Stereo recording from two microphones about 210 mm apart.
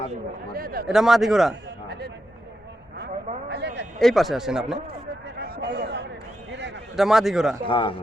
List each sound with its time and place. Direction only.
0.5 s speech: 45° right (ahead or behind)
0.9 s a man's voice: centre (ahead or behind)
3.5 s a sound: 55° right (ahead or behind)
4.0 s a man's voice: centre (ahead or behind)
5.4 s a sound: 50° right (ahead or behind)
6.9 s a man's voice: centre (ahead or behind)
7.7 s speech: 25° left (ahead or behind)